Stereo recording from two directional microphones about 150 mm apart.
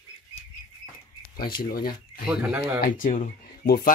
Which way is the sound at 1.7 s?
85° left.